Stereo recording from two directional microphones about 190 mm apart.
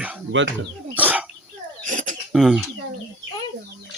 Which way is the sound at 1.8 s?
40° right (ahead or behind).